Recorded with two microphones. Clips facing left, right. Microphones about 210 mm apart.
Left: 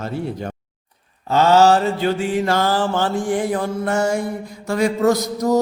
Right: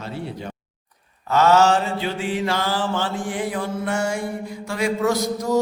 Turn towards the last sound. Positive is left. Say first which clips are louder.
# left 4 dB
turn(degrees=45)  # may be behind; listen again after turning